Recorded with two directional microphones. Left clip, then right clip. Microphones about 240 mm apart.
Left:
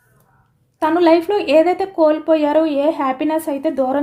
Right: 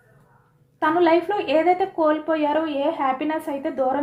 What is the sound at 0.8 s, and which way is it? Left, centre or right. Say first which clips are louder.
A woman's voice: left 5 dB; left.